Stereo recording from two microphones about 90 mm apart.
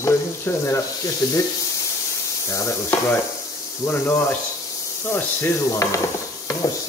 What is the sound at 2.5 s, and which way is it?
Sizzle, 30° left (ahead or behind).